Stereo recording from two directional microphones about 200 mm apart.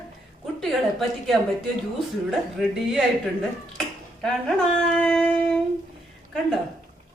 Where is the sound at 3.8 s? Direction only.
5° left (ahead or behind).